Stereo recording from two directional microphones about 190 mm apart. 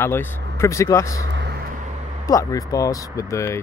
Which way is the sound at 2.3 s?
20° left (ahead or behind).